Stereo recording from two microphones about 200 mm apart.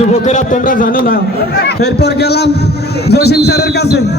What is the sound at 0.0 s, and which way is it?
A man's voice, 35° left (ahead or behind).